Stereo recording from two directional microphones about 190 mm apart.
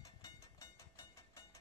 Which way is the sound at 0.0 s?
15° left (ahead or behind).